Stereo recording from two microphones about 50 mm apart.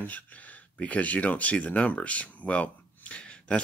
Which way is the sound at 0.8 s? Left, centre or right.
Left.